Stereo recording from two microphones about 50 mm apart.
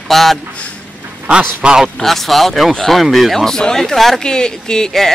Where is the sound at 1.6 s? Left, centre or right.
Centre.